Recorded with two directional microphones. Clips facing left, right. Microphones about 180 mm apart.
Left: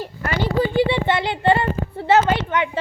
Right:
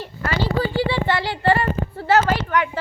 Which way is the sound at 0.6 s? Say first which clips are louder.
Left 3 dB; 20° left (ahead or behind).